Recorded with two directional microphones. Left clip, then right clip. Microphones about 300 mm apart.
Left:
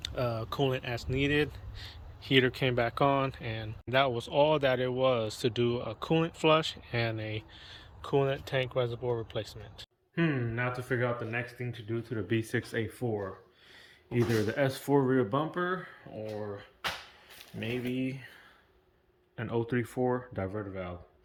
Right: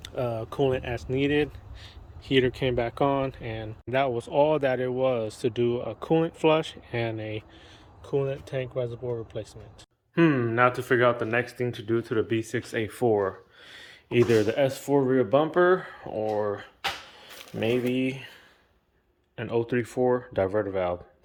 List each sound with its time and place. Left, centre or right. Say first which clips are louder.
0.0 s speech: right 3 dB; centre
10.2 s speech: right 11 dB; centre
12.3 s speech: right 3 dB; centre
17.9 s speech: right 7 dB; centre
19.4 s speech: right 6 dB; centre